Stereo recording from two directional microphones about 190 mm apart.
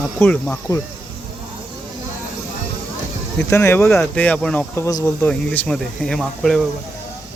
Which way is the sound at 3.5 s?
15° left (ahead or behind).